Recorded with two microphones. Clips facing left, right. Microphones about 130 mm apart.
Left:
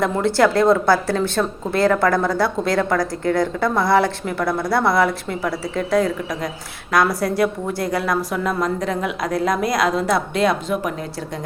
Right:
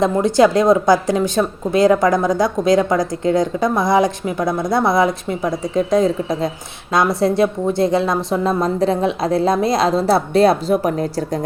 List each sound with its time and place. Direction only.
0.0 s a woman's voice: 20° right (ahead or behind); by 11.3 s 35° right (ahead or behind)